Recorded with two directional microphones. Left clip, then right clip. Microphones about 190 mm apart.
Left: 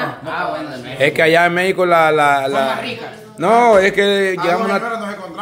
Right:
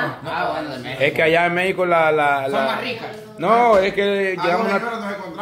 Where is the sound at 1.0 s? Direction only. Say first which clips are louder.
Left 4 dB; 25° left (ahead or behind).